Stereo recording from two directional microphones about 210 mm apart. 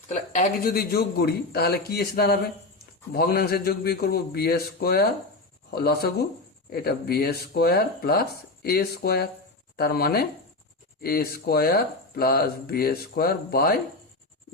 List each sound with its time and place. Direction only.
0.1 s speech: 40° left (ahead or behind)